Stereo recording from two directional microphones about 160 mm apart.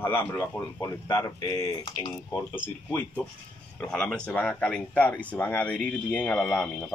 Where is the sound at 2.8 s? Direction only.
10° left (ahead or behind).